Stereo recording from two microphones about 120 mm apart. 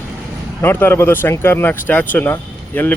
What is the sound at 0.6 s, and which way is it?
Speech, 15° left (ahead or behind).